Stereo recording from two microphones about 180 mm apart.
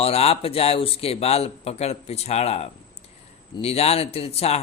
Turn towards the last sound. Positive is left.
turn(degrees=35)  # may be behind; listen again after turning